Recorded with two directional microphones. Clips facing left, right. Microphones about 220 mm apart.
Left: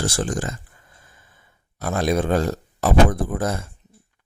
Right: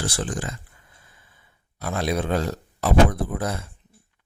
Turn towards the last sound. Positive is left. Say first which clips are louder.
# left 3 dB
turn(degrees=45)  # may be behind; listen again after turning